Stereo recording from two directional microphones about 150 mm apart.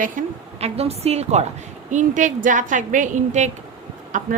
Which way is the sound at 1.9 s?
55° right (ahead or behind).